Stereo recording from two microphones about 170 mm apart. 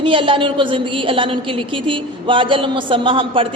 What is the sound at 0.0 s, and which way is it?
A woman's voice, 30° right (ahead or behind).